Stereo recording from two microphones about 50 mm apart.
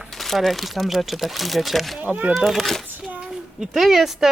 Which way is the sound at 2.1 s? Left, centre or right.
Right.